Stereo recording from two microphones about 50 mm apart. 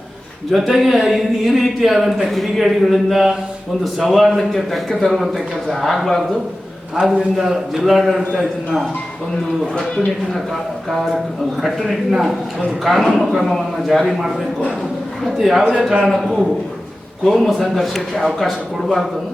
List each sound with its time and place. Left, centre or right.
0.5 s a man's voice: centre
6.9 s a man's voice: centre
7.3 s a man's voice: centre
11.6 s a man's voice: centre
15.4 s a man's voice: centre